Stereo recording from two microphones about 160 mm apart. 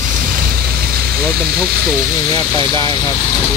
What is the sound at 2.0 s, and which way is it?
Speech, 20° left (ahead or behind).